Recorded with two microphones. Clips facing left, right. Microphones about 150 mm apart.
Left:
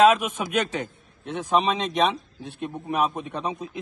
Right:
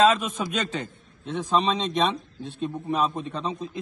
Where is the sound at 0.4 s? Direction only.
10° left (ahead or behind).